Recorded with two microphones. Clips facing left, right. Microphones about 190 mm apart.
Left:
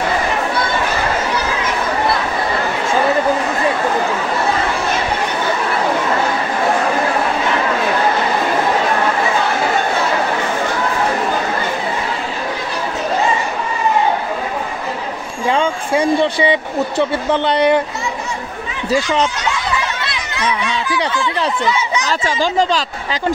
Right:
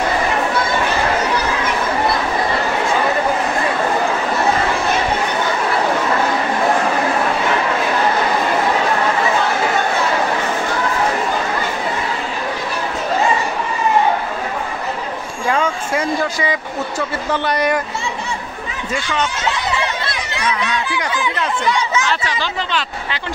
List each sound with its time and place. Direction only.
15.5 s speech: 30° left (ahead or behind)
18.9 s speech: 35° left (ahead or behind)
22.0 s speech: 40° left (ahead or behind)